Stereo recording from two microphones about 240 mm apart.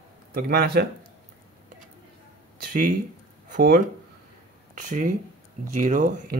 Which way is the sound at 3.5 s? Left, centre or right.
Right.